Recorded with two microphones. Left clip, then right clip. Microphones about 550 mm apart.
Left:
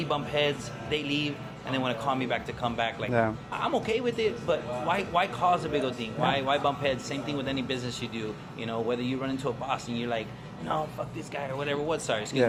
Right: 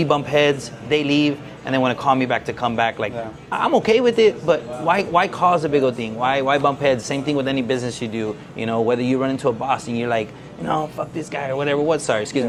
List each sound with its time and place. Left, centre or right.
0.0 s a man's voice: right